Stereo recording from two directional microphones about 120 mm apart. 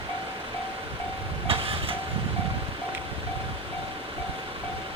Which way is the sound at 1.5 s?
50° right (ahead or behind).